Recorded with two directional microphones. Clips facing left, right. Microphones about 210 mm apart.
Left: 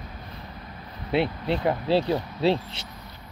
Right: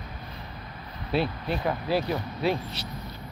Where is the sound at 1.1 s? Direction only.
25° left (ahead or behind).